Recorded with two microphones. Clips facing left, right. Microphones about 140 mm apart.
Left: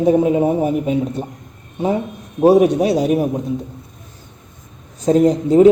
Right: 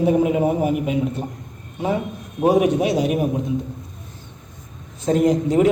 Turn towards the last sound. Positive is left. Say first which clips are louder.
# left 5 dB
turn(degrees=30)  # may be behind; listen again after turning